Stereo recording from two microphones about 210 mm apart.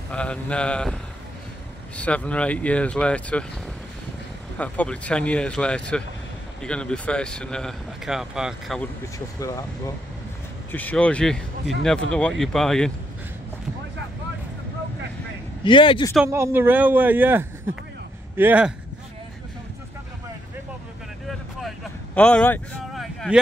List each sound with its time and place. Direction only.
0.1 s speech: 5° left (ahead or behind)
2.0 s speech: 5° left (ahead or behind)
4.6 s speech: 5° left (ahead or behind)
9.4 s speech: 15° left (ahead or behind)
15.6 s speech: 25° left (ahead or behind)
16.3 s speech: 10° right (ahead or behind)
21.3 s vehicle: centre (ahead or behind)